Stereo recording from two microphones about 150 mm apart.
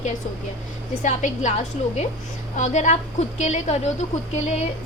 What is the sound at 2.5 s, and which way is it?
Speech, 55° left (ahead or behind).